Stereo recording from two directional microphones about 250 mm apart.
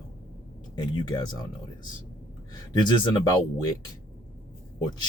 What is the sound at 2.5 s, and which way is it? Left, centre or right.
Speech, centre.